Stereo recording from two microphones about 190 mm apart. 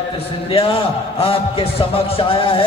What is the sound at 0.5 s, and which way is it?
A man's voice, 30° left (ahead or behind).